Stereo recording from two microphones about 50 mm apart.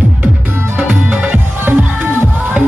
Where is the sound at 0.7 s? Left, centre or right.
Right.